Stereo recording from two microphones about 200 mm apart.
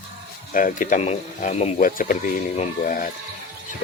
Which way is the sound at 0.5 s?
40° left (ahead or behind).